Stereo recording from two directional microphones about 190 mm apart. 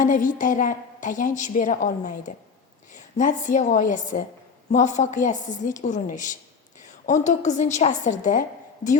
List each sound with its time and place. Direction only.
0.0 s a woman's voice: 45° left (ahead or behind)